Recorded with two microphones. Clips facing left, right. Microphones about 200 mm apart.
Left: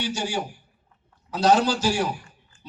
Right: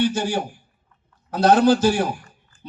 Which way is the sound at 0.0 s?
55° right (ahead or behind).